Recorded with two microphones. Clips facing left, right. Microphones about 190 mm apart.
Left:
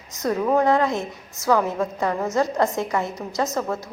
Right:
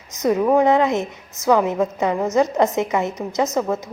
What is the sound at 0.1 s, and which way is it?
A woman's voice, 20° right (ahead or behind).